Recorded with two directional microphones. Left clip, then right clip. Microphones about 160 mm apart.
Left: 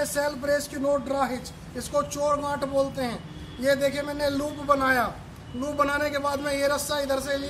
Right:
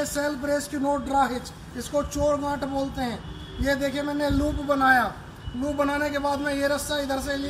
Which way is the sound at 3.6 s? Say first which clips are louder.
Left 2 dB; 25° left (ahead or behind).